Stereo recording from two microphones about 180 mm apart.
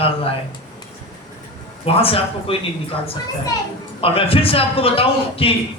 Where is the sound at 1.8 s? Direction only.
30° left (ahead or behind).